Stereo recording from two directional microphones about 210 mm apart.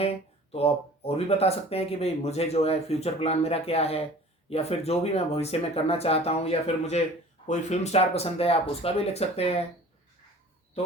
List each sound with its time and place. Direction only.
0.5 s speech: 30° left (ahead or behind)